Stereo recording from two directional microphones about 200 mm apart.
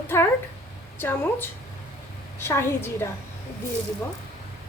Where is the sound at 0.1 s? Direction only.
10° left (ahead or behind).